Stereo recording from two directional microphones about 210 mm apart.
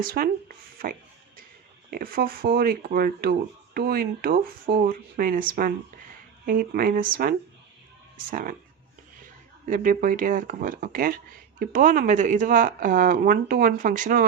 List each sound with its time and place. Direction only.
0.0 s speech: 45° right (ahead or behind)
9.6 s speech: 40° right (ahead or behind)